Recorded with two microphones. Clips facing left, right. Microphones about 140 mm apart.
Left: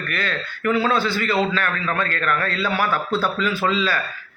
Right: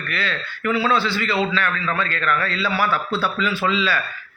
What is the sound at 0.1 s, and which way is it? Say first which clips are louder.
A man's voice: right 1 dB; 45° left (ahead or behind).